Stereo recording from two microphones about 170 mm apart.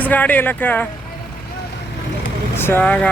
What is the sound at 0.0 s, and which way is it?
Speech, 10° left (ahead or behind).